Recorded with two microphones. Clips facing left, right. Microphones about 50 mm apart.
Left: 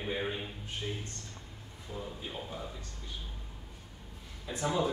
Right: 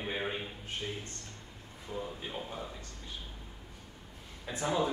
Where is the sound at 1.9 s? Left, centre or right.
Centre.